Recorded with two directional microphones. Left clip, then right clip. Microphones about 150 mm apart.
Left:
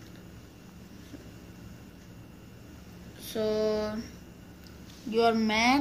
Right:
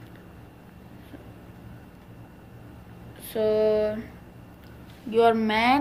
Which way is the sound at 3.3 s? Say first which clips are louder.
Right 6 dB; 20° left (ahead or behind).